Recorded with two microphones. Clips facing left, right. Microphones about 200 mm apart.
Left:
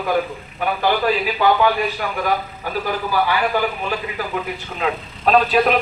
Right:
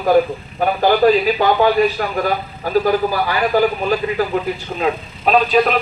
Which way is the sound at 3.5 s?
40° right (ahead or behind).